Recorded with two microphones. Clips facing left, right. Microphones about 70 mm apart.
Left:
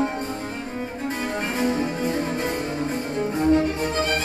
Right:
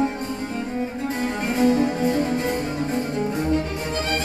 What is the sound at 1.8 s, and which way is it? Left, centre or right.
Music, right.